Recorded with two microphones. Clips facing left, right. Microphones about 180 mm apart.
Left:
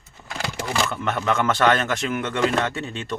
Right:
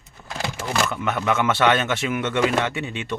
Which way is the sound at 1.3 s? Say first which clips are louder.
Even; 25° right (ahead or behind).